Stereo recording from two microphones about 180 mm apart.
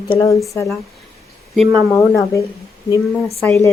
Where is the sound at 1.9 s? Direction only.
15° left (ahead or behind).